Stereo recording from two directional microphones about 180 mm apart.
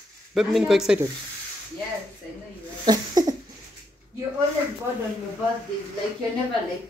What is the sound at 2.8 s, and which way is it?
Speech, 20° right (ahead or behind).